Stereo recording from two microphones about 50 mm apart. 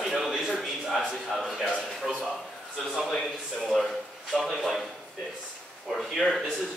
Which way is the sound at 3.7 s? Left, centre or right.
Centre.